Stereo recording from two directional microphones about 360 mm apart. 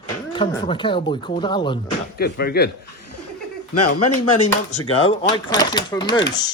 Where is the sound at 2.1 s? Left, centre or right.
Left.